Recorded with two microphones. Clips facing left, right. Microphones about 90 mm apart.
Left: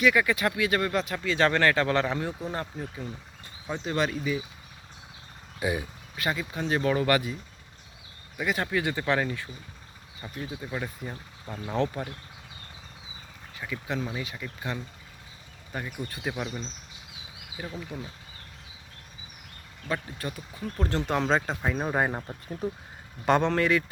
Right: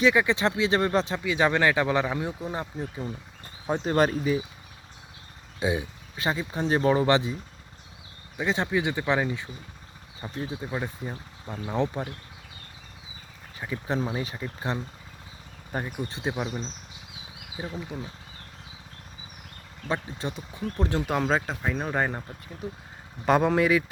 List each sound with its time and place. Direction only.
0.0 s speech: 25° right (ahead or behind)
1.2 s speech: 10° right (ahead or behind)
3.7 s speech: 45° right (ahead or behind)
5.5 s speech: 20° right (ahead or behind)
8.4 s speech: 20° right (ahead or behind)
13.6 s speech: 30° right (ahead or behind)
19.9 s speech: 25° right (ahead or behind)
21.1 s speech: 5° right (ahead or behind); by 22.2 s 10° left (ahead or behind)
22.6 s speech: 40° left (ahead or behind)
23.2 s speech: 5° right (ahead or behind)